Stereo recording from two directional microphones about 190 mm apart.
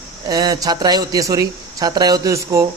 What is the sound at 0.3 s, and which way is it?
Speech, 20° right (ahead or behind).